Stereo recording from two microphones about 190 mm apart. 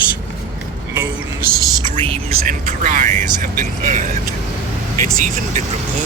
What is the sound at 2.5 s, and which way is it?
Speech, 45° right (ahead or behind).